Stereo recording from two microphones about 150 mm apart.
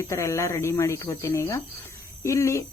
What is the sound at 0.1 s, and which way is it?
Speech, 20° left (ahead or behind).